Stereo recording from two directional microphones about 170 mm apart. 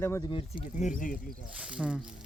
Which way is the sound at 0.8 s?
50° left (ahead or behind).